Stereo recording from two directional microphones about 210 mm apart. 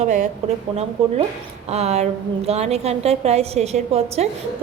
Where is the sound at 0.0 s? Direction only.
35° right (ahead or behind).